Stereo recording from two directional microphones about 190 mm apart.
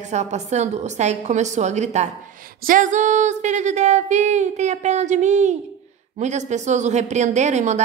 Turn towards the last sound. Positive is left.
turn(degrees=-35)  # may be behind; listen again after turning